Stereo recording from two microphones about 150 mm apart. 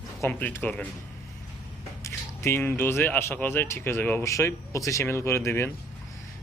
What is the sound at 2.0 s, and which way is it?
Speech, 15° left (ahead or behind).